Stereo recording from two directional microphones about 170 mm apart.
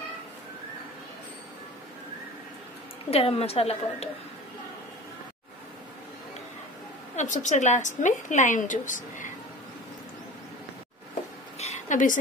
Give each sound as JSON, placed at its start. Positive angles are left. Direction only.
{"t": 3.1, "sound": "a woman's voice", "side_deg": 35}
{"t": 7.2, "sound": "a woman's voice", "side_deg": 45}
{"t": 11.5, "sound": "a sound", "side_deg": 40}